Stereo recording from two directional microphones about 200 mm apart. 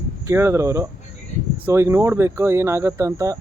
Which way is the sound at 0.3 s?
15° right (ahead or behind).